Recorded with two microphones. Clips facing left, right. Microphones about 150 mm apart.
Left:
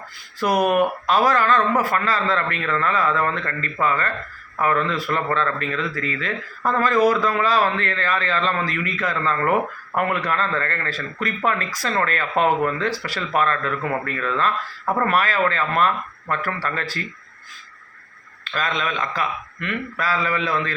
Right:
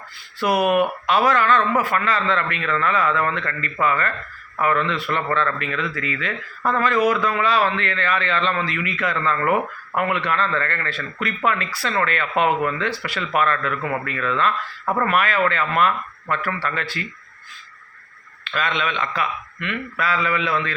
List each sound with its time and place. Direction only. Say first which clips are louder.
0.3 s speech: even; 40° left (ahead or behind)
18.5 s speech: right 1 dB; 35° left (ahead or behind)